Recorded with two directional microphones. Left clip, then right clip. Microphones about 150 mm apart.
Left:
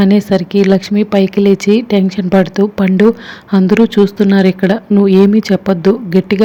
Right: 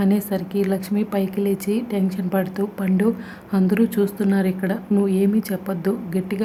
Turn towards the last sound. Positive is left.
turn(degrees=35)  # may be behind; listen again after turning